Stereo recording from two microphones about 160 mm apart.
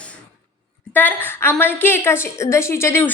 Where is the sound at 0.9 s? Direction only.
10° left (ahead or behind).